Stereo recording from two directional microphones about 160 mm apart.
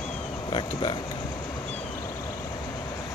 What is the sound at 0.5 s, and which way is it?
Speech, 30° left (ahead or behind).